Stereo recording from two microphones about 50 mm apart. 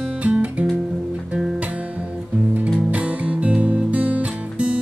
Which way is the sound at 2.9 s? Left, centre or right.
Right.